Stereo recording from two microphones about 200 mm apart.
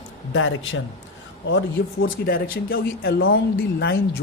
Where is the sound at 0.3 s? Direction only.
75° left (ahead or behind).